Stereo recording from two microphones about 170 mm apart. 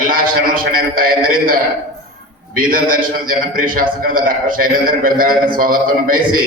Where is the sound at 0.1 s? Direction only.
55° right (ahead or behind).